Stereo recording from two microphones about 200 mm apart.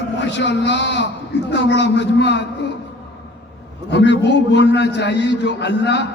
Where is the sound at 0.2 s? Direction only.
60° left (ahead or behind).